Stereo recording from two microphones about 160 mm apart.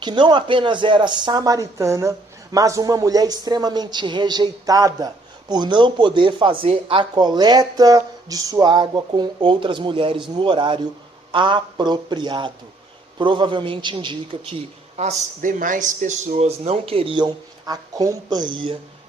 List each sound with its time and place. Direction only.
0.0 s a man's voice: 30° right (ahead or behind)
14.9 s a man's voice: 50° right (ahead or behind); by 18.8 s 30° right (ahead or behind)